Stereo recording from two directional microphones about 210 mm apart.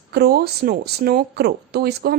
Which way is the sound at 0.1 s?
50° right (ahead or behind).